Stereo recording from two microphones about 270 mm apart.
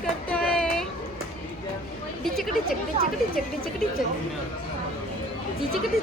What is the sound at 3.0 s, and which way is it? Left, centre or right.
Speech, right.